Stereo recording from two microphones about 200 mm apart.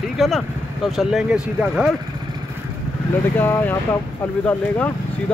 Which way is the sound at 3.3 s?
10° left (ahead or behind).